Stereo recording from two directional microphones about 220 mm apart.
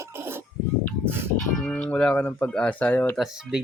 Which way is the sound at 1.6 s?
5° left (ahead or behind).